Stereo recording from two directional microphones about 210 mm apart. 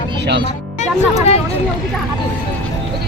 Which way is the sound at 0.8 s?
30° left (ahead or behind).